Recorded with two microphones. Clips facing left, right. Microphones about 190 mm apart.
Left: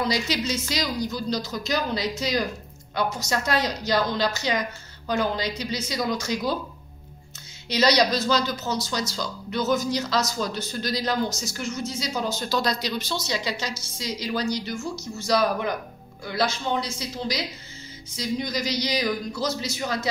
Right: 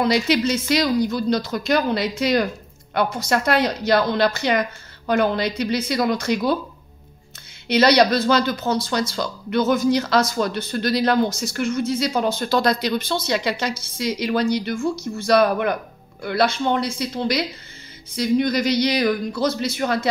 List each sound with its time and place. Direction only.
0.0 s speech: 60° right (ahead or behind)
7.6 s speech: 60° right (ahead or behind)